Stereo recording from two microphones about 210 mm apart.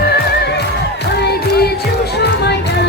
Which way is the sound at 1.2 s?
50° left (ahead or behind).